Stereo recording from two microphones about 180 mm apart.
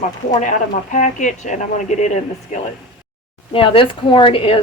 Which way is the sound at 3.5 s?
30° left (ahead or behind).